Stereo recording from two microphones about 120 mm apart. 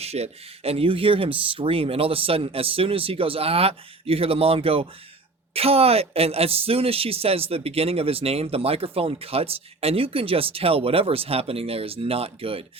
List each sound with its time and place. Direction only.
0.0 s speech: 60° right (ahead or behind)